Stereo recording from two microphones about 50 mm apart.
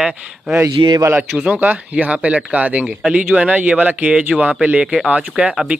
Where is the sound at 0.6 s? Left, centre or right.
Right.